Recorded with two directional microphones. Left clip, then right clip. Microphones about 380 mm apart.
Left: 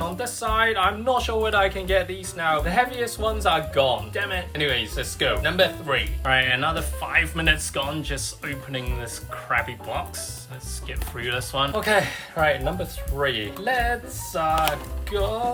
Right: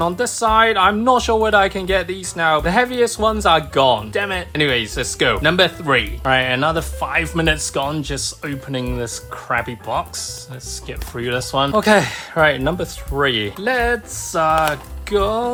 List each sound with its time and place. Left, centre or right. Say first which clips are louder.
0.2 s speech: right 7 dB; centre
15.1 s speech: right 8 dB; right